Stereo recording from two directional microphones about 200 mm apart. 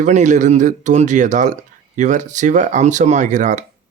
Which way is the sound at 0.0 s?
35° right (ahead or behind).